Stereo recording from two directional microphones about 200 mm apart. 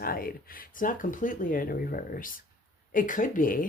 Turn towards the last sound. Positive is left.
turn(degrees=45)  # may be behind; listen again after turning